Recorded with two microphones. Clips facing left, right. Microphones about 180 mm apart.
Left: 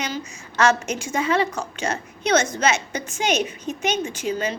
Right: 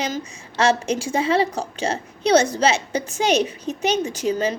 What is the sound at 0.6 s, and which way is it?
A woman's voice, 30° right (ahead or behind).